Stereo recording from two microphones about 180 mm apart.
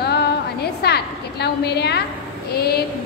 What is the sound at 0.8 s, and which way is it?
A woman's voice, 65° left (ahead or behind).